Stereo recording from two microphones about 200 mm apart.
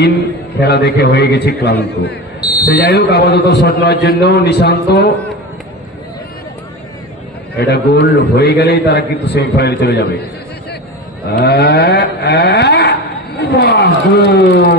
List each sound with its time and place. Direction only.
0.6 s a man's voice: 55° left (ahead or behind)
7.5 s a man's voice: 55° left (ahead or behind)
11.3 s a sound: 55° left (ahead or behind)